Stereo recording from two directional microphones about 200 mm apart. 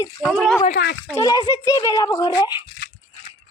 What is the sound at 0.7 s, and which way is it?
Speech, 50° left (ahead or behind).